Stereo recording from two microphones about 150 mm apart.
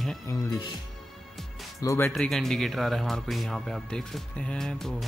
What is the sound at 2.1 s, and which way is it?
Speech, centre (ahead or behind).